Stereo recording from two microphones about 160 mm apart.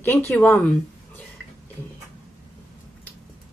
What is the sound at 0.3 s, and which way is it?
Speech, 10° left (ahead or behind).